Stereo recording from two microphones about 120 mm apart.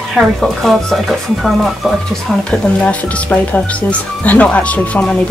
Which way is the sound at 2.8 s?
10° left (ahead or behind).